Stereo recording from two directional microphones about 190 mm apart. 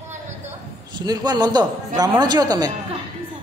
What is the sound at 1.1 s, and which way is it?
A man's voice, 20° right (ahead or behind).